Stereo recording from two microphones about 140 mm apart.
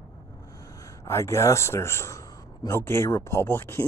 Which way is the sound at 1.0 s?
20° left (ahead or behind).